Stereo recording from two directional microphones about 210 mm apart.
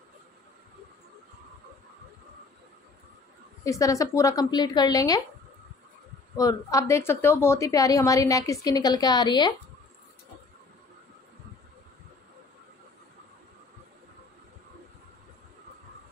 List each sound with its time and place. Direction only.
3.6 s a woman's voice: 15° left (ahead or behind)
6.3 s a woman's voice: 15° left (ahead or behind)